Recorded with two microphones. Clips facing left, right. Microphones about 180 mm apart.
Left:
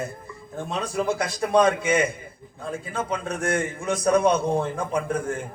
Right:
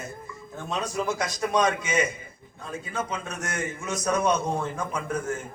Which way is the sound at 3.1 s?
30° left (ahead or behind).